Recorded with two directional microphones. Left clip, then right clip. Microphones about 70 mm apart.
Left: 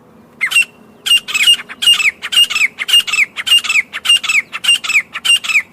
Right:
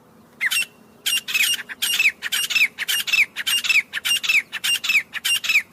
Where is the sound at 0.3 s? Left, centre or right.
Left.